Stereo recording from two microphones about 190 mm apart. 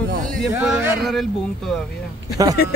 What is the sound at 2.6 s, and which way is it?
Speech, 55° left (ahead or behind).